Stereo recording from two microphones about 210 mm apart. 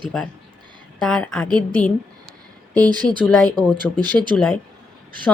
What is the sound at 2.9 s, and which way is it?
Speech, 20° right (ahead or behind).